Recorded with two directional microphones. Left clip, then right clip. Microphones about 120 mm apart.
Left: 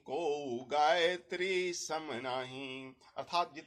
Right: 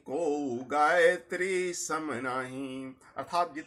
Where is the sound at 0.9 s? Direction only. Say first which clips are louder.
Right 9 dB; 35° left (ahead or behind).